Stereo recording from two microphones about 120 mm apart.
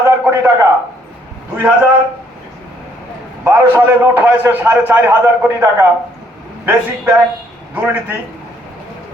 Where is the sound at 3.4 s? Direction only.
15° right (ahead or behind).